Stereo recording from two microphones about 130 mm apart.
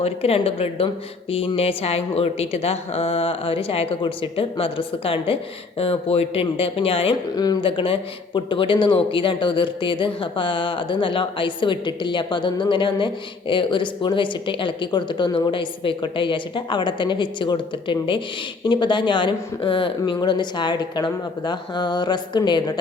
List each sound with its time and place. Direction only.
0.0 s a woman's voice: 50° left (ahead or behind)
7.3 s speech: 30° left (ahead or behind)
7.6 s speech: 40° left (ahead or behind)